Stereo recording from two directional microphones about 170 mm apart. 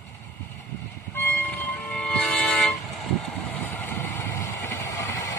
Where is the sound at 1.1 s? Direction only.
10° left (ahead or behind).